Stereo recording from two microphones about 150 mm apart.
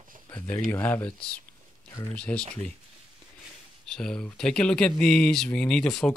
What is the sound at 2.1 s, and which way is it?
Speech, 5° left (ahead or behind).